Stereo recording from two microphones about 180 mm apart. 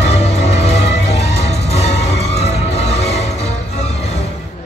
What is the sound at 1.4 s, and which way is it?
Music, 35° left (ahead or behind).